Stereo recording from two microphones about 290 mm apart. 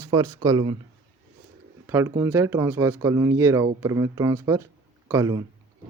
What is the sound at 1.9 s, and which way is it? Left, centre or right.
Speech, centre.